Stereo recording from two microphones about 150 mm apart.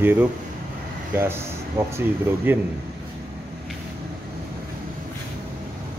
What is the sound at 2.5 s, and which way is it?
Speech, 15° right (ahead or behind).